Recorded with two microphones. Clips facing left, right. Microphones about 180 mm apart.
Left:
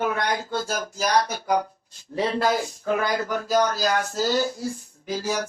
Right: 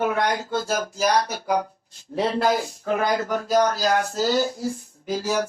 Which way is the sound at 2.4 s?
45° right (ahead or behind).